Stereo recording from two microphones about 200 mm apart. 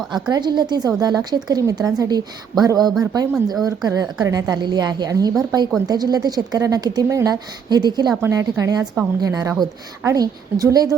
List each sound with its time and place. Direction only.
0.3 s a woman's voice: 20° right (ahead or behind)